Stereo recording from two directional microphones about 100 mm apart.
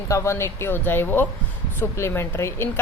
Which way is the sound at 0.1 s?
25° left (ahead or behind).